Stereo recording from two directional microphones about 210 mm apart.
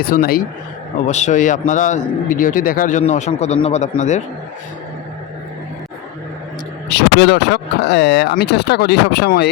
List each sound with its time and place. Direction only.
0.0 s speech: 45° left (ahead or behind)
1.0 s a man's voice: 35° left (ahead or behind)
6.9 s speech: 55° left (ahead or behind)